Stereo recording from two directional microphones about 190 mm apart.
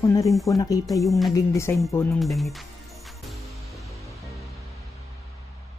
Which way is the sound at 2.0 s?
Centre (ahead or behind).